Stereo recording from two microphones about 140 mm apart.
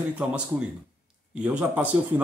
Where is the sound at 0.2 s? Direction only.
10° right (ahead or behind).